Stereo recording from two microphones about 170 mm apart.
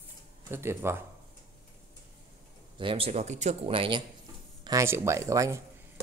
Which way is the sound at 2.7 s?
30° right (ahead or behind).